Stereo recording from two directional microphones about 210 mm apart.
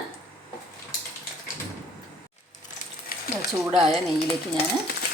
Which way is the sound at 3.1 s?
45° left (ahead or behind).